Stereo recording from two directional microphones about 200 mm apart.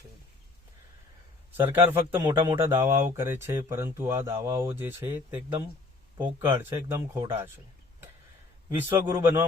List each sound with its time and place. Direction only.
1.5 s speech: 10° right (ahead or behind)
2.2 s speech: 20° right (ahead or behind)
8.7 s speech: 10° right (ahead or behind)